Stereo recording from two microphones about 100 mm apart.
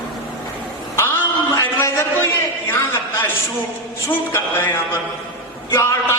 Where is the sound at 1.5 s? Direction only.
30° left (ahead or behind).